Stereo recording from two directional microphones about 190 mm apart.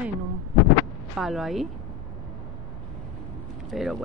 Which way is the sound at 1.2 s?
Centre (ahead or behind).